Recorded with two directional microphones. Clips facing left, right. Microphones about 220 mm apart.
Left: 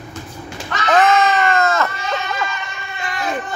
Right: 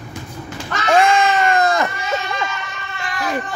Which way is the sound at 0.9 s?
10° right (ahead or behind).